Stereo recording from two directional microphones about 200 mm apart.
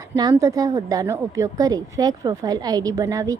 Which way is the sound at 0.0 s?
20° right (ahead or behind).